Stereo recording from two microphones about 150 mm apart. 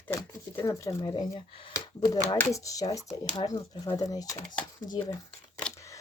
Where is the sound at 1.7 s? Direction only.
25° left (ahead or behind).